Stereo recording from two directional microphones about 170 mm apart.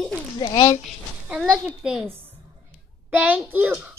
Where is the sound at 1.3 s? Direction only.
5° right (ahead or behind).